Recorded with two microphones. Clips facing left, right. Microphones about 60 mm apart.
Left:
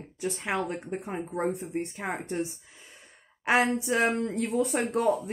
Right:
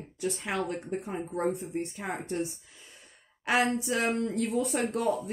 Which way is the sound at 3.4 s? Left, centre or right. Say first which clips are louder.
Left 2 dB; left.